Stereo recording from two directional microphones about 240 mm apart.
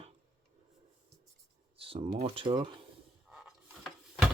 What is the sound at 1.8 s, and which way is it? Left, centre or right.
Speech, right.